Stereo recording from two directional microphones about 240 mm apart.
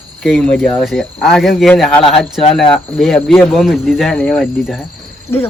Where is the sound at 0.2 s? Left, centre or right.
Centre.